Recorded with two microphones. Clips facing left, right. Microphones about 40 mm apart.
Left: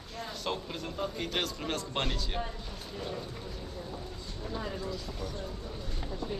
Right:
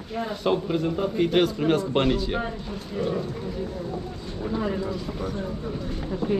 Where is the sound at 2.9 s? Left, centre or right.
Right.